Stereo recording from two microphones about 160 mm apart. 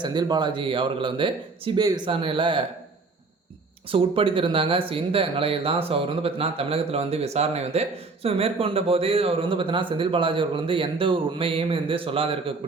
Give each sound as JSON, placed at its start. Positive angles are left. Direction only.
{"t": 0.0, "sound": "speech", "side_deg": -25}
{"t": 3.8, "sound": "speech", "side_deg": -35}